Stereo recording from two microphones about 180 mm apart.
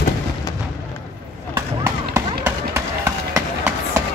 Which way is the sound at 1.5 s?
15° right (ahead or behind).